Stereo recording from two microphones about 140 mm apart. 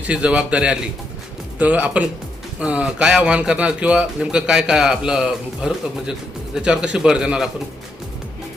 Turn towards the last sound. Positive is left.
turn(degrees=-5)  # may be behind; listen again after turning